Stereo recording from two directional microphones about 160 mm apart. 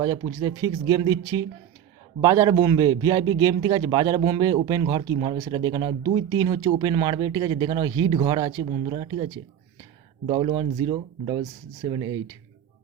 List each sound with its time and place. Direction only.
0.0 s a man's voice: 25° right (ahead or behind)